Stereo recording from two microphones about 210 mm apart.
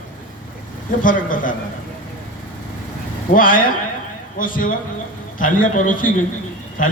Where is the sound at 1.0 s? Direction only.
40° left (ahead or behind).